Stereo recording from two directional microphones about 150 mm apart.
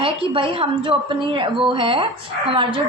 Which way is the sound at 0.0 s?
35° right (ahead or behind).